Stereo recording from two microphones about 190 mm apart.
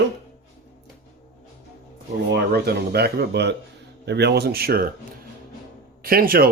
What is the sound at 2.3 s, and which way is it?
Speech, 55° right (ahead or behind).